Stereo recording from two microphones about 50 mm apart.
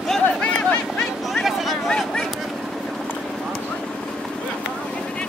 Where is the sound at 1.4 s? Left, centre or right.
Centre.